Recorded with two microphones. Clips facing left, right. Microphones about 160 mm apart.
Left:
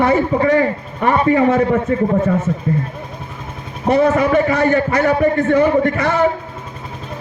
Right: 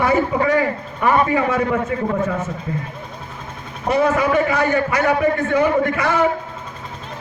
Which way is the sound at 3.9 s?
45° left (ahead or behind).